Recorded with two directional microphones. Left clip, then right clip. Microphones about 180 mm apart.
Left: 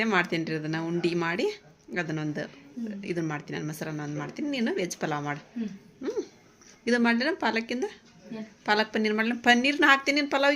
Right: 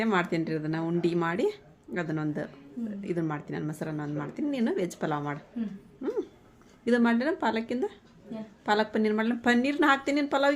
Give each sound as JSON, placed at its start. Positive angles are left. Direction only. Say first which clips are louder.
{"t": 0.0, "sound": "a woman's voice", "louder": "left 2 dB", "side_deg": -5}
{"t": 6.8, "sound": "a woman's voice", "louder": "left 1 dB", "side_deg": -5}